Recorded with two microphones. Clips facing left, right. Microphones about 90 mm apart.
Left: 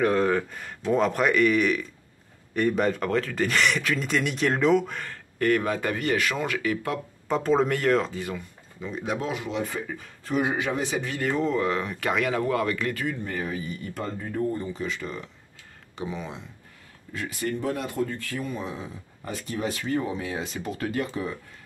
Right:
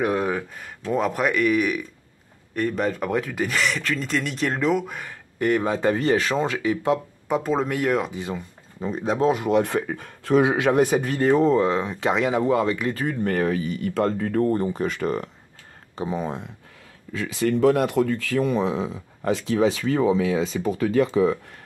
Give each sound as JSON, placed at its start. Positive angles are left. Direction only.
{"t": 0.0, "sound": "speech", "side_deg": -10}
{"t": 3.1, "sound": "speech", "side_deg": -10}
{"t": 7.2, "sound": "speech", "side_deg": -5}
{"t": 8.8, "sound": "speech", "side_deg": -35}
{"t": 9.4, "sound": "speech", "side_deg": -60}
{"t": 10.8, "sound": "speech", "side_deg": -50}
{"t": 11.1, "sound": "speech", "side_deg": -35}
{"t": 12.9, "sound": "speech", "side_deg": -40}
{"t": 13.2, "sound": "speech", "side_deg": -70}
{"t": 16.0, "sound": "speech", "side_deg": -40}
{"t": 17.3, "sound": "speech", "side_deg": -90}